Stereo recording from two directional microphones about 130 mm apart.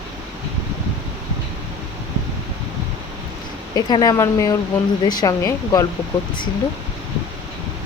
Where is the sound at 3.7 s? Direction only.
30° left (ahead or behind).